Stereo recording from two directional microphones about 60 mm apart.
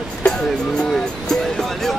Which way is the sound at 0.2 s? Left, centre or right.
Centre.